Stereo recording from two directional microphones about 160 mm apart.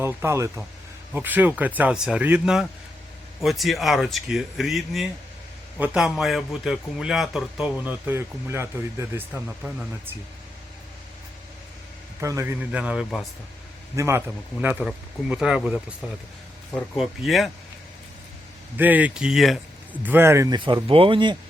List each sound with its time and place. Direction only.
0.0 s speech: 15° right (ahead or behind)
12.2 s a man's voice: 20° right (ahead or behind)
12.7 s speech: 5° right (ahead or behind)
13.9 s speech: 15° right (ahead or behind)
17.0 s speech: centre (ahead or behind)
18.8 s speech: 10° right (ahead or behind)
20.6 s speech: 30° right (ahead or behind)